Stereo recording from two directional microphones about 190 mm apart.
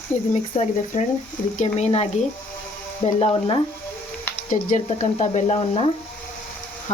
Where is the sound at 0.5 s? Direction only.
35° left (ahead or behind).